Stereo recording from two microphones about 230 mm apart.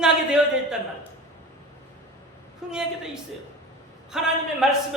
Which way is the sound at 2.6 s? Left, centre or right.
Centre.